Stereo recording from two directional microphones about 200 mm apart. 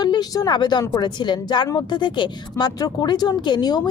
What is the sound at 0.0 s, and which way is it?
A woman's voice, 20° left (ahead or behind).